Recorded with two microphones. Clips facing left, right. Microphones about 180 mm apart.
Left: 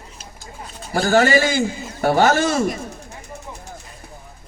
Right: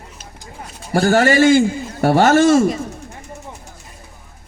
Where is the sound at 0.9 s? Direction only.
50° right (ahead or behind).